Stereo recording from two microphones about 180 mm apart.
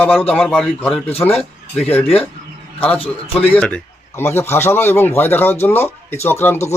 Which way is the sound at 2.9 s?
30° left (ahead or behind).